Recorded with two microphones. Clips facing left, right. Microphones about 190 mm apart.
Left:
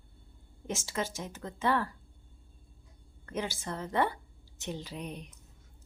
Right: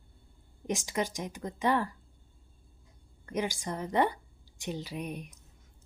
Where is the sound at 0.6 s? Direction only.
15° right (ahead or behind).